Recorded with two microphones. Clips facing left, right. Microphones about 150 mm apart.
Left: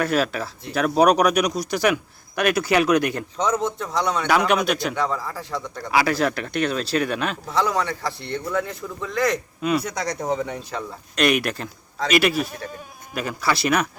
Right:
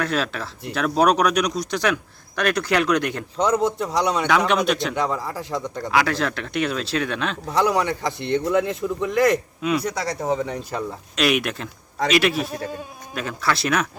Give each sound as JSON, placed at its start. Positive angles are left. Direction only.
{"t": 0.0, "sound": "a man's voice", "side_deg": 5}
{"t": 4.3, "sound": "a man's voice", "side_deg": 5}
{"t": 4.9, "sound": "a man's voice", "side_deg": -15}
{"t": 5.9, "sound": "a man's voice", "side_deg": 5}
{"t": 7.4, "sound": "a man's voice", "side_deg": -15}
{"t": 9.6, "sound": "a man's voice", "side_deg": 0}